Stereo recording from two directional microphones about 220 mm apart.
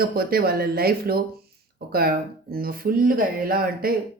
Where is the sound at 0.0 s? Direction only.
45° right (ahead or behind).